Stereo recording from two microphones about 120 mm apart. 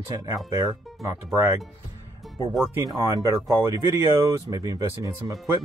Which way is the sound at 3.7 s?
25° right (ahead or behind).